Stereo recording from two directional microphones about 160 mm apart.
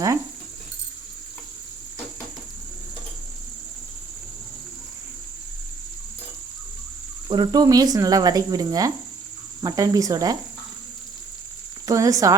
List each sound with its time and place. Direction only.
7.3 s speech: 25° right (ahead or behind)
11.9 s speech: 20° right (ahead or behind)